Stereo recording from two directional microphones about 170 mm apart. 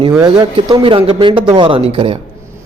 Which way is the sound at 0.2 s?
25° right (ahead or behind).